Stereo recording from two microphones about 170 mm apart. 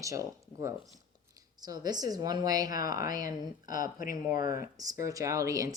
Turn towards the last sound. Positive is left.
turn(degrees=-20)  # may be behind; listen again after turning